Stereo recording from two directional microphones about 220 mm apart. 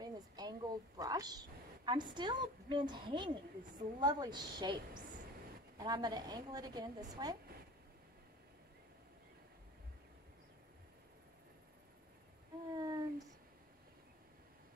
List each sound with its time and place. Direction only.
0.0 s a woman's voice: 20° right (ahead or behind)
5.8 s a woman's voice: 20° right (ahead or behind)
12.7 s speech: 15° right (ahead or behind)